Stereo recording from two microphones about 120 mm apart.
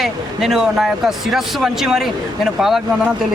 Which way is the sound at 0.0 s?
5° right (ahead or behind).